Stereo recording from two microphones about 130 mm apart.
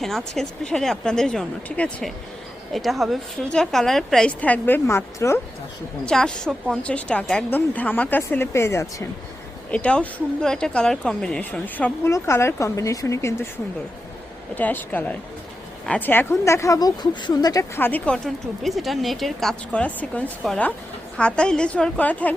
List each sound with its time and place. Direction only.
0.0 s speech: 5° left (ahead or behind); by 5.4 s 20° left (ahead or behind)
6.1 s speech: 5° left (ahead or behind); by 9.0 s 20° left (ahead or behind)
9.7 s speech: 10° left (ahead or behind)
14.5 s speech: 15° left (ahead or behind)
17.7 s speech: 15° left (ahead or behind)